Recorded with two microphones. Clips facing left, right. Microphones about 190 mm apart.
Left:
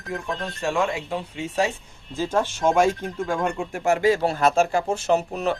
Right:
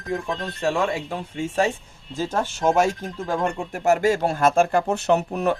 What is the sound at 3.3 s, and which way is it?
Speech, 40° right (ahead or behind).